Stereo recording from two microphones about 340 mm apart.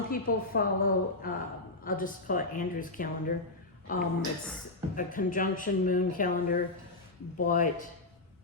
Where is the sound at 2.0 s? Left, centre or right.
Left.